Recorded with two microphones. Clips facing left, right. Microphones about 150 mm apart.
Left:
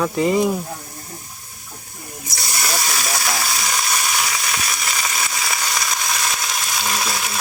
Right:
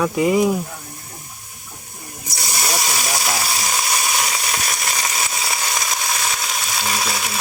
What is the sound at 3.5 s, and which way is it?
Frying, 15° right (ahead or behind).